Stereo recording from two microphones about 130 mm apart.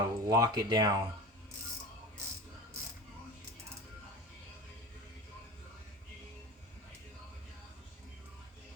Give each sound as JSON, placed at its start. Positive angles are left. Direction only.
{"t": 0.0, "sound": "speech", "side_deg": -30}